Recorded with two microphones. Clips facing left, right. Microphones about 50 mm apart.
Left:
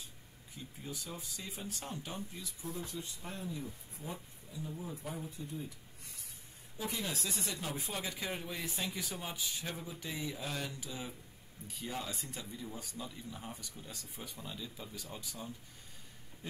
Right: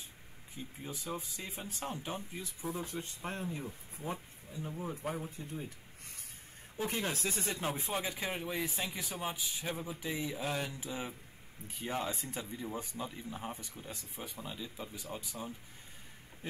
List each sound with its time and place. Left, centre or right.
0.8 s speech: right